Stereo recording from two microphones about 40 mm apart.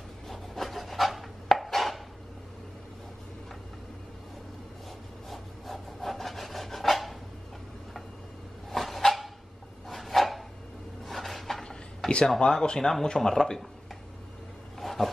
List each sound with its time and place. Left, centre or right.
0.3 s wood: centre
5.3 s rub: centre
8.6 s a sound: centre
12.4 s speech: centre
14.8 s roaring cats: centre